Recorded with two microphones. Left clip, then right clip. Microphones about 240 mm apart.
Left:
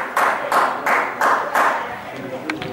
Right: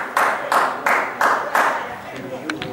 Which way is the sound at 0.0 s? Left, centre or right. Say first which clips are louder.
Left 1 dB; centre.